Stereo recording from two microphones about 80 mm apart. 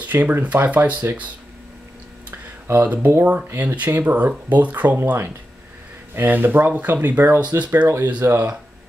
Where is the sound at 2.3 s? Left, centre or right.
Right.